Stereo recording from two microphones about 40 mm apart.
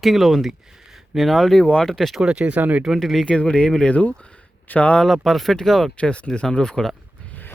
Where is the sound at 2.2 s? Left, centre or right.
Right.